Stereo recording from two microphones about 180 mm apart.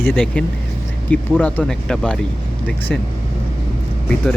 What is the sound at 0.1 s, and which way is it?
Speech, 5° left (ahead or behind).